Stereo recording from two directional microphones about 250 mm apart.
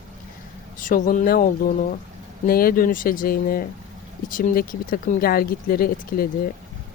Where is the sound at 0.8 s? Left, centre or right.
Left.